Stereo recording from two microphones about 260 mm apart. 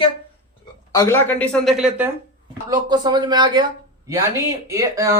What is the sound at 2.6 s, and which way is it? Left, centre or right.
Speech, centre.